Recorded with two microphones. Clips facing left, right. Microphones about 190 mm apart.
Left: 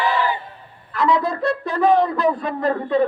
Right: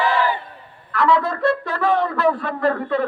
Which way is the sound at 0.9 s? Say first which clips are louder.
Right 1 dB; 20° left (ahead or behind).